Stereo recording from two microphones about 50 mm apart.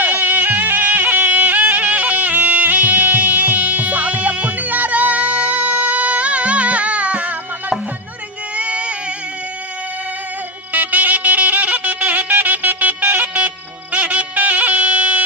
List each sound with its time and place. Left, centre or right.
0.0 s music: right
8.5 s a sound: right
10.7 s music: right